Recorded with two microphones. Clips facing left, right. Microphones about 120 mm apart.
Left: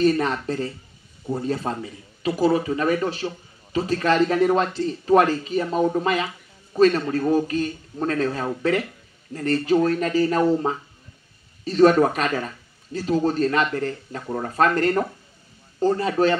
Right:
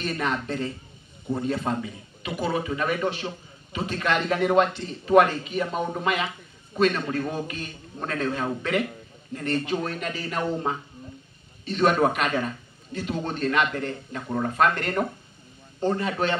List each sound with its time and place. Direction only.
0.0 s a man's voice: 35° left (ahead or behind)